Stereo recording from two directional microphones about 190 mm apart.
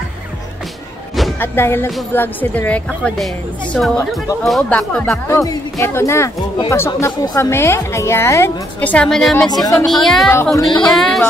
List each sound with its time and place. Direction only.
1.4 s a woman's voice: 10° left (ahead or behind)
5.4 s a woman's voice: 15° left (ahead or behind)
10.3 s a woman's voice: 15° left (ahead or behind)
10.9 s speech: centre (ahead or behind)